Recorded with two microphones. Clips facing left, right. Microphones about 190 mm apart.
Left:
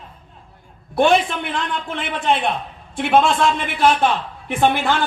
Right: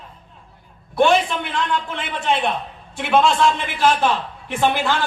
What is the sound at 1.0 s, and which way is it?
A man's voice, 55° left (ahead or behind).